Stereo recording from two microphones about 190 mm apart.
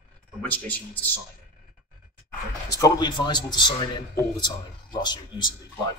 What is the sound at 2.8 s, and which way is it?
A man's voice, 25° left (ahead or behind).